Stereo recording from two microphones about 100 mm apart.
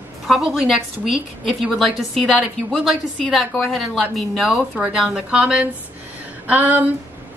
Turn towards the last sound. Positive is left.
turn(degrees=-15)  # may be behind; listen again after turning